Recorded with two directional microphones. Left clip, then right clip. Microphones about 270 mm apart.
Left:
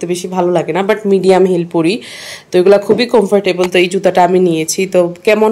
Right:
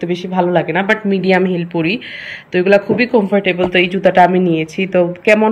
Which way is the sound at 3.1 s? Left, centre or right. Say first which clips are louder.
Left 2 dB; centre.